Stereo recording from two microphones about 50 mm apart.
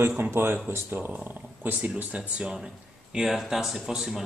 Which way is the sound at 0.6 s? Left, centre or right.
Right.